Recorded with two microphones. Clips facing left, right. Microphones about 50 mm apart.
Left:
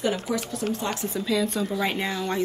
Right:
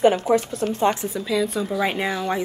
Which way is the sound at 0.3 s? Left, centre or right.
Right.